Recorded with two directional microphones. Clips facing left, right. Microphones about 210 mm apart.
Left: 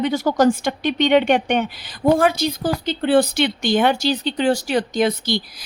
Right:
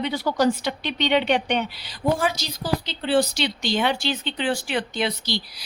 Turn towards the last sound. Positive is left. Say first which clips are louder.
# left 7 dB
turn(degrees=50)  # may be behind; listen again after turning